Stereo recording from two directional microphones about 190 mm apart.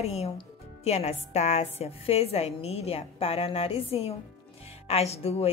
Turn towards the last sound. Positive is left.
turn(degrees=30)  # may be behind; listen again after turning